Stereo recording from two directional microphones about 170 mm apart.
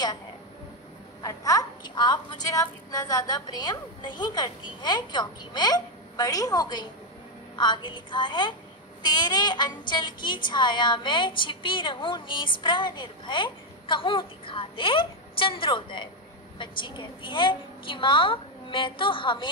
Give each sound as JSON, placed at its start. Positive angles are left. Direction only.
{"t": 1.2, "sound": "a woman's voice", "side_deg": 20}